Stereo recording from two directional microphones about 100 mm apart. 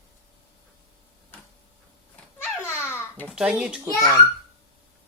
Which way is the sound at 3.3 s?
5° right (ahead or behind).